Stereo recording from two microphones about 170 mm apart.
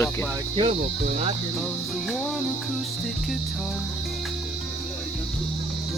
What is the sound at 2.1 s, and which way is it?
Music, centre (ahead or behind).